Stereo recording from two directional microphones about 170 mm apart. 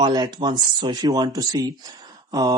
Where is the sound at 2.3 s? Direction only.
25° right (ahead or behind).